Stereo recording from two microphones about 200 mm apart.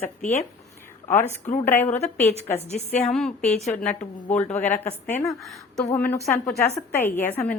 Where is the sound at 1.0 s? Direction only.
10° left (ahead or behind).